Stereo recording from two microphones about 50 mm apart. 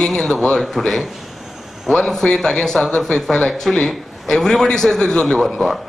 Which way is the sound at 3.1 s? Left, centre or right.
Centre.